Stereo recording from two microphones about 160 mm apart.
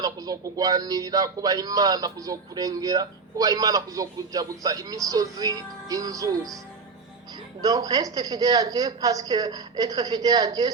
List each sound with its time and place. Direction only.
0.0 s speech: 25° right (ahead or behind)
7.6 s speech: 25° right (ahead or behind)